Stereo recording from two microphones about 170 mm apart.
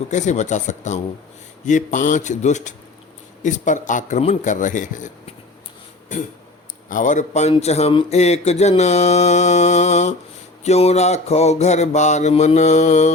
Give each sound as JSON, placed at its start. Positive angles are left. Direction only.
{"t": 0.1, "sound": "a man's voice", "side_deg": 45}
{"t": 6.9, "sound": "a man's voice", "side_deg": 50}
{"t": 7.5, "sound": "a sound", "side_deg": 40}